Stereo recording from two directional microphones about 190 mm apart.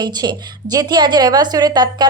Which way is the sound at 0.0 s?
20° right (ahead or behind).